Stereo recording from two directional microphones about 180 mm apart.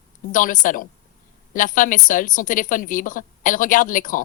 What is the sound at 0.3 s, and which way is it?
Speech, 50° left (ahead or behind).